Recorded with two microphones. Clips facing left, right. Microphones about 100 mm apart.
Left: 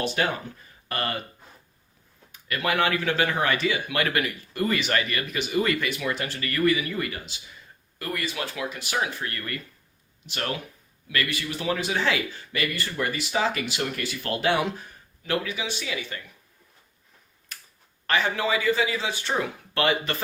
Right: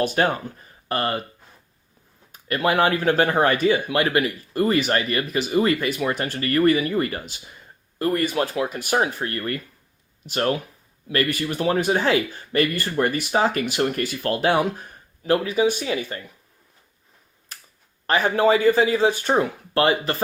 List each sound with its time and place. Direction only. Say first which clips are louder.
0.0 s speech: right 5 dB; 45° right (ahead or behind)
0.9 s speech: right 5 dB; 30° right (ahead or behind)
2.3 s speech: right 5 dB; 35° right (ahead or behind)
3.8 s speech: right 5 dB; 30° right (ahead or behind)
7.9 s speech: right 10 dB; 35° right (ahead or behind)
8.2 s speech: right 8 dB; 50° right (ahead or behind)
9.2 s speech: right 6 dB; 35° right (ahead or behind)
18.0 s speech: right 7 dB; 35° right (ahead or behind)